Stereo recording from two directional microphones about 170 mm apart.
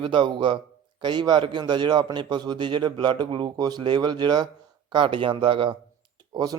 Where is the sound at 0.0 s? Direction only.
30° right (ahead or behind).